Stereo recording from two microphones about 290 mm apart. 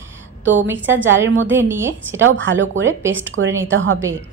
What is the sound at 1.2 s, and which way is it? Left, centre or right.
Speech, right.